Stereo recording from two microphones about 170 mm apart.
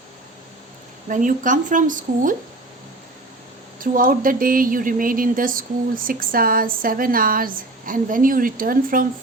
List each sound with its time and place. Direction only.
1.0 s a woman's voice: 50° right (ahead or behind)
3.8 s speech: 55° right (ahead or behind)